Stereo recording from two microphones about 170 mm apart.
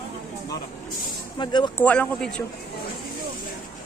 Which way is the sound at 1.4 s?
25° left (ahead or behind).